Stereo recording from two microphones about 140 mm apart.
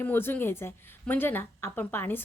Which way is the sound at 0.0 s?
15° left (ahead or behind).